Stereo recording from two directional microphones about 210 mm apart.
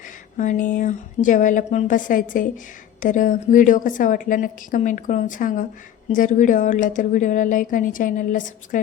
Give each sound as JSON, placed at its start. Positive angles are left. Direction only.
{"t": 0.3, "sound": "a woman's voice", "side_deg": 40}